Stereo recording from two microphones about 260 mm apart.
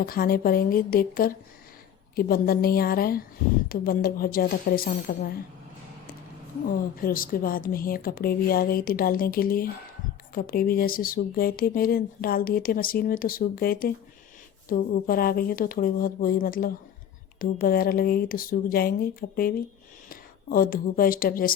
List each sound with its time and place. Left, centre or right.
0.0 s speech: left
6.9 s a woman's voice: left